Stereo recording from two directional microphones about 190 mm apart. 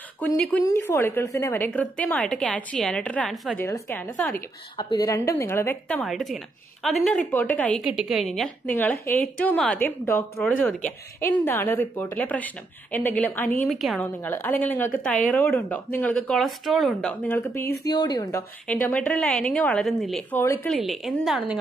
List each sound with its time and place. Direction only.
0.2 s a woman's voice: 5° left (ahead or behind)
3.5 s a woman's voice: 15° left (ahead or behind)
4.7 s a woman's voice: 25° left (ahead or behind)
5.9 s a woman's voice: centre (ahead or behind)
17.8 s a woman's voice: 20° left (ahead or behind)
18.7 s a woman's voice: 5° left (ahead or behind)